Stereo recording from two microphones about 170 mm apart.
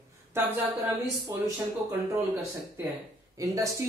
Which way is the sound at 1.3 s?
20° right (ahead or behind).